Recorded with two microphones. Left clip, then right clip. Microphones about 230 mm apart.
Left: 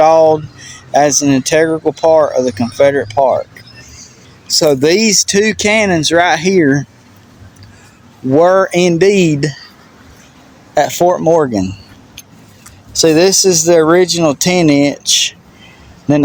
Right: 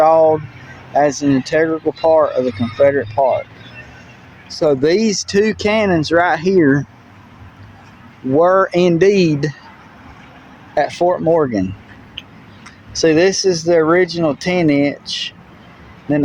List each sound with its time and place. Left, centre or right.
0.0 s speech: left
4.4 s speech: left
8.4 s speech: left
10.8 s speech: left
13.0 s speech: left